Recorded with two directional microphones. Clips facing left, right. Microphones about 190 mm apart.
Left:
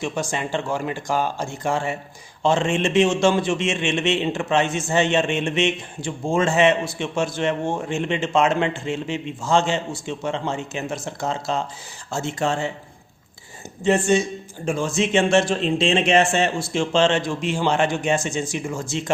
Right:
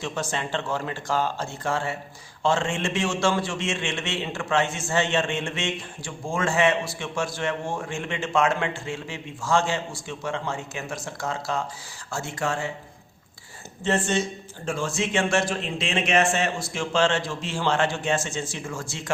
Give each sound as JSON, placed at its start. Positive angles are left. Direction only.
{"t": 0.0, "sound": "a man's voice", "side_deg": 15}
{"t": 13.8, "sound": "a man's voice", "side_deg": 10}